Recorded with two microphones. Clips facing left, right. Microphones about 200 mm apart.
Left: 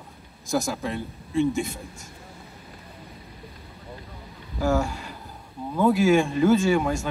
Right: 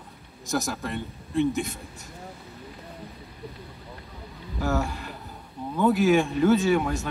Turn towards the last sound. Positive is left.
turn(degrees=0)  # may be behind; listen again after turning